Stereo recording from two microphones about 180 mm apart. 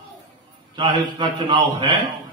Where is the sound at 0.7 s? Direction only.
25° right (ahead or behind).